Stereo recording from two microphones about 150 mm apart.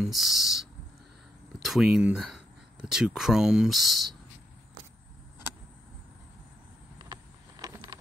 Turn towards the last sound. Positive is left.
turn(degrees=-25)  # may be behind; listen again after turning